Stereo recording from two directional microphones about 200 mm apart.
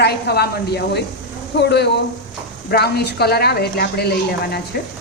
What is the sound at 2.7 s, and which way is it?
A woman's voice, 55° left (ahead or behind).